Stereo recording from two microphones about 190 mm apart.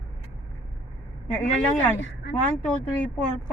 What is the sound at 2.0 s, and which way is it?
Speech, 80° left.